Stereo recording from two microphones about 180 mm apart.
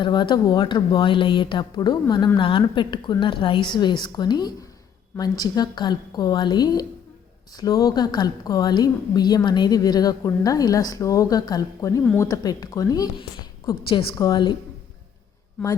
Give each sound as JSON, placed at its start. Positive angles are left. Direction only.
{"t": 0.0, "sound": "speech", "side_deg": 25}